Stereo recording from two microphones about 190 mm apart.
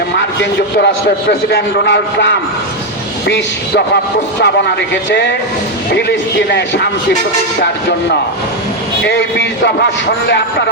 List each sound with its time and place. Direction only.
1.3 s a man's voice: 65° left (ahead or behind)
5.0 s a man's voice: 70° left (ahead or behind)
9.0 s speech: 65° left (ahead or behind)